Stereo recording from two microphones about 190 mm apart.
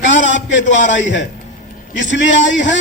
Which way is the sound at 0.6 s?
40° left (ahead or behind).